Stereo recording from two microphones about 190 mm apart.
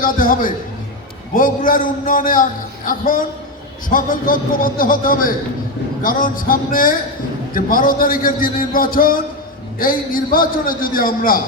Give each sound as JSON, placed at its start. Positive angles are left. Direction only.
{"t": 0.0, "sound": "a man's voice", "side_deg": 45}